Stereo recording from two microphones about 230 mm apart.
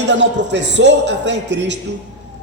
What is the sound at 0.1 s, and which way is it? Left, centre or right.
A man's voice, right.